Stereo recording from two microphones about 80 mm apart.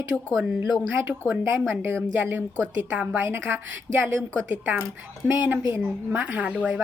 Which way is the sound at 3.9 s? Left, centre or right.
Centre.